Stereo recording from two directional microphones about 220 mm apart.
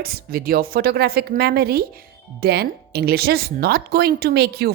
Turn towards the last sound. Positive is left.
turn(degrees=-45)  # may be behind; listen again after turning